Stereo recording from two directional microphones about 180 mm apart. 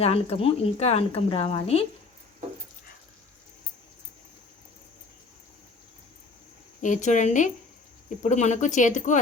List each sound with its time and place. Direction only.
0.0 s speech: 35° left (ahead or behind)
6.8 s speech: 45° left (ahead or behind)